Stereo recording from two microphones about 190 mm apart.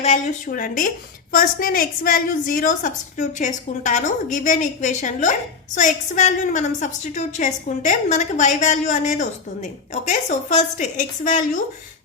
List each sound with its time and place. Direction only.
0.0 s a woman's voice: 40° left (ahead or behind)